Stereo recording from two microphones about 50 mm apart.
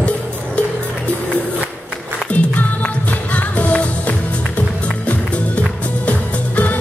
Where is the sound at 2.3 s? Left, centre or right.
Left.